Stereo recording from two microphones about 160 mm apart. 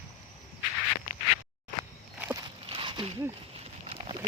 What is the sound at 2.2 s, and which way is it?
Walk, 20° right (ahead or behind).